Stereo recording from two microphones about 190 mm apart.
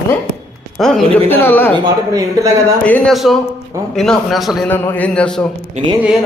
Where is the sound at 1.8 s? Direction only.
15° right (ahead or behind).